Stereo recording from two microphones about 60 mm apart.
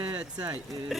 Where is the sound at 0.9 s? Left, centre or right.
Centre.